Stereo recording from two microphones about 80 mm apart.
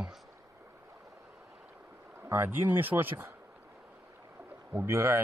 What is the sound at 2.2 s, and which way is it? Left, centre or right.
Speech, right.